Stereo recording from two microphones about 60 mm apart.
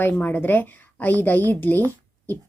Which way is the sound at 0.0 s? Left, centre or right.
Left.